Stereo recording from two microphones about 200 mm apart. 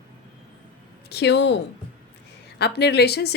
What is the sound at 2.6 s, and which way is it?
Speech, 55° left (ahead or behind).